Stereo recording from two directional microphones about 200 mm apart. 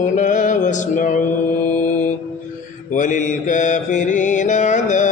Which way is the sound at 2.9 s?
40° left (ahead or behind).